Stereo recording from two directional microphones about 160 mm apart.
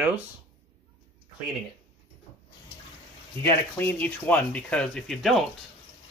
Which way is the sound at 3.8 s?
10° left (ahead or behind).